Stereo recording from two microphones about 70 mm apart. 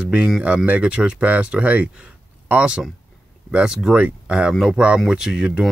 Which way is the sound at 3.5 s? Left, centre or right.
Centre.